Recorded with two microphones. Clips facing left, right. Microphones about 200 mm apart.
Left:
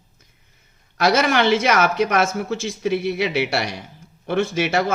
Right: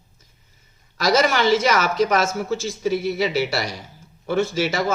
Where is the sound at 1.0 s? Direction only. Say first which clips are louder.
Left 1 dB; 60° left (ahead or behind).